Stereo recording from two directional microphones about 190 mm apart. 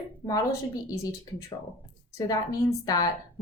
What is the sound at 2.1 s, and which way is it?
Speech, 20° left (ahead or behind).